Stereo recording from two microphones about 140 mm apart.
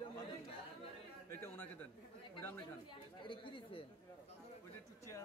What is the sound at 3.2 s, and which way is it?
Speech, 35° left (ahead or behind).